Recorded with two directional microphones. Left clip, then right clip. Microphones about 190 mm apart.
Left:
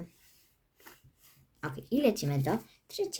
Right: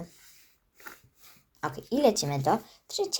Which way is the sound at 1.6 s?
25° left (ahead or behind).